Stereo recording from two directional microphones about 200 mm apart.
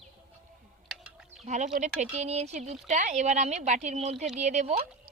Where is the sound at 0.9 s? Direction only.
5° right (ahead or behind).